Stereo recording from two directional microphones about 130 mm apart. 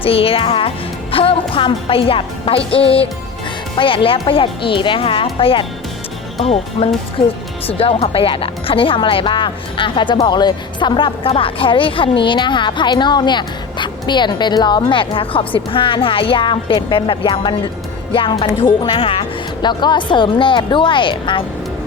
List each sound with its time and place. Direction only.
0.0 s a woman's voice: 45° left (ahead or behind)